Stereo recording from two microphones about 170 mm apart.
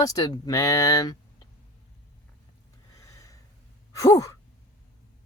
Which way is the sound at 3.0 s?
20° left (ahead or behind).